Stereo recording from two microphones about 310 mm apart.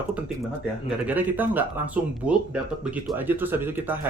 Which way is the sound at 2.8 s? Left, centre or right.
Centre.